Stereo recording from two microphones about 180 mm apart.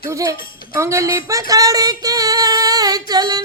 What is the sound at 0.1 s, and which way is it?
A woman's voice, 15° right (ahead or behind).